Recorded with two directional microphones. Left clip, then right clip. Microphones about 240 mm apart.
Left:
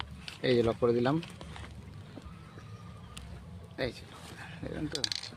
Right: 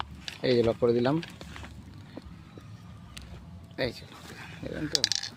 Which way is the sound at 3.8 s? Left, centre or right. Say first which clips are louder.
Right 4 dB; right.